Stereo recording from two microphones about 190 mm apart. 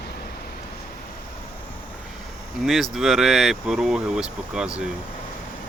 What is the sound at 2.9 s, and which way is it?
Speech, centre (ahead or behind).